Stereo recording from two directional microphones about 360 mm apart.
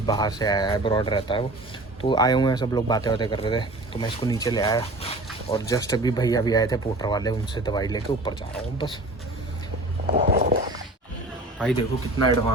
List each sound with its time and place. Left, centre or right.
0.0 s speech: centre
10.2 s a sound: right
11.6 s speech: centre